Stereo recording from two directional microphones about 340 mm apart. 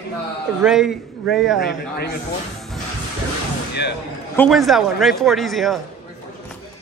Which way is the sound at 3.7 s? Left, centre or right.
Left.